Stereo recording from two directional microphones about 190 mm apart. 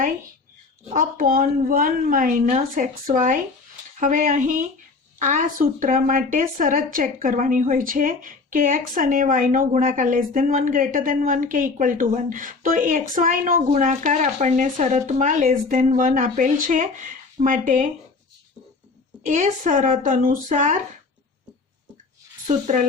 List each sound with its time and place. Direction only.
0.9 s a woman's voice: 45° right (ahead or behind)
19.3 s a woman's voice: 40° right (ahead or behind)
22.4 s speech: 40° right (ahead or behind)